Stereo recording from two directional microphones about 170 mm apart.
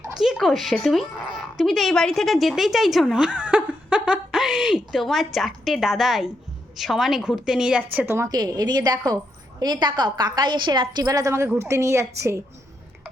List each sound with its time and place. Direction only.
0.2 s a woman's voice: centre (ahead or behind)